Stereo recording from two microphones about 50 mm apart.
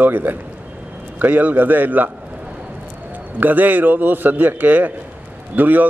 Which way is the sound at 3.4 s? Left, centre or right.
Right.